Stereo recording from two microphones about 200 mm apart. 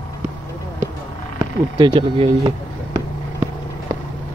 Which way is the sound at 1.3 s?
20° right (ahead or behind).